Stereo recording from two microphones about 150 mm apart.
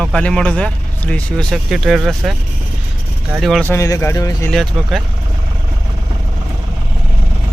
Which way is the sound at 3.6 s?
20° left (ahead or behind).